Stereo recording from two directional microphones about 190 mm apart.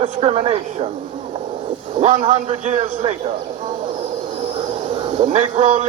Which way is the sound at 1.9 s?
35° right (ahead or behind).